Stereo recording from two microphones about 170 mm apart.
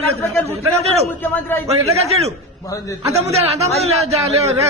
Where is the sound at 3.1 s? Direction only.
40° right (ahead or behind).